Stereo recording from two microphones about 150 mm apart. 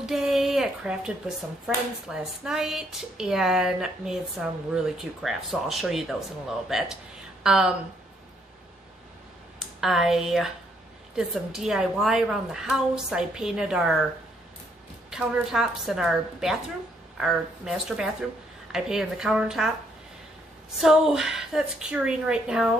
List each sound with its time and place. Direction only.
0.0 s a sound: centre (ahead or behind)
2.0 s a woman's voice: 5° right (ahead or behind)
9.8 s a woman's voice: centre (ahead or behind)
15.0 s a woman's voice: 5° right (ahead or behind)
20.8 s a woman's voice: 5° right (ahead or behind)